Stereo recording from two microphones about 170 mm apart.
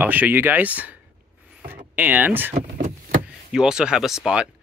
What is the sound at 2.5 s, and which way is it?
Vehicle, 45° right (ahead or behind).